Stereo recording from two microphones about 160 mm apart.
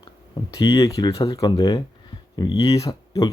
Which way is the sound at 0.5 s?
20° left (ahead or behind).